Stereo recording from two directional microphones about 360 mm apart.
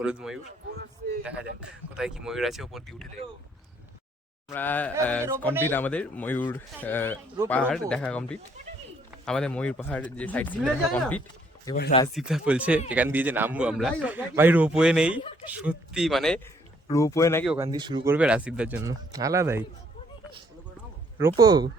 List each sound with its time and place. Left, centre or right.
0.0 s speech: centre
0.7 s a sound: right
2.0 s speech: centre
4.4 s speech: centre
11.7 s speech: left
12.0 s speech: centre
21.2 s speech: centre